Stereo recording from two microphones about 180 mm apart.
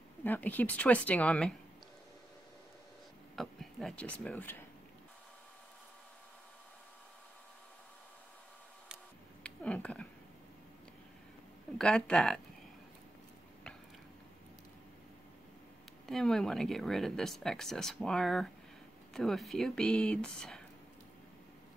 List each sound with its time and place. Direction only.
0.2 s a woman's voice: 10° left (ahead or behind)
3.3 s speech: 5° left (ahead or behind)
9.4 s speech: 5° left (ahead or behind)
11.8 s speech: 5° left (ahead or behind)
16.1 s speech: centre (ahead or behind)